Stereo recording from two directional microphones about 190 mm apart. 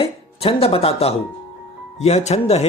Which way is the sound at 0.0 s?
30° left (ahead or behind).